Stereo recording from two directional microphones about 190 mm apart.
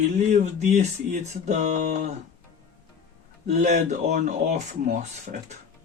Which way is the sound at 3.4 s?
35° right (ahead or behind).